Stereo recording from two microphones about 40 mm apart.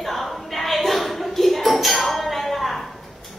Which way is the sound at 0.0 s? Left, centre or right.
Centre.